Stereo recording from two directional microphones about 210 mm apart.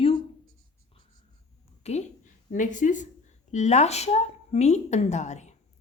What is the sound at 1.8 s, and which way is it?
A woman's voice, 30° left (ahead or behind).